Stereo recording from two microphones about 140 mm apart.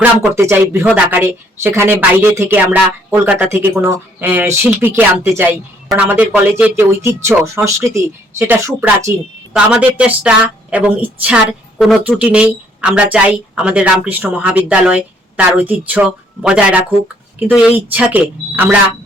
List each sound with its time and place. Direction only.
0.0 s speech: 15° right (ahead or behind)